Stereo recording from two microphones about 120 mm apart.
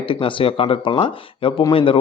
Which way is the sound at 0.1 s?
45° left (ahead or behind).